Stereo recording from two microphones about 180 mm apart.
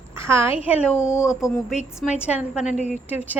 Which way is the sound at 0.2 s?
15° right (ahead or behind).